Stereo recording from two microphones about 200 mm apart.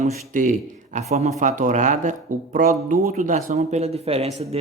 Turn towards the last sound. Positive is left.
turn(degrees=-30)  # may be behind; listen again after turning